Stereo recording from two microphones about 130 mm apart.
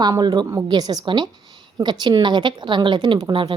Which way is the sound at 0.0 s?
30° right (ahead or behind).